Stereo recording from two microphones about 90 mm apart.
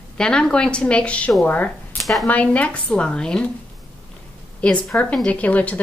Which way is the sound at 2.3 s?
15° left (ahead or behind).